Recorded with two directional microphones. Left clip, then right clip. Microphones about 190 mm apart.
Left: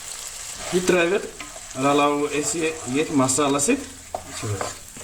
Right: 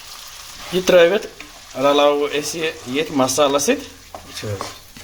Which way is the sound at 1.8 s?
45° right (ahead or behind).